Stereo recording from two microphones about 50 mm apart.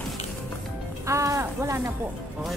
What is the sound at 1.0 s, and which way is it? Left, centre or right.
Speech, right.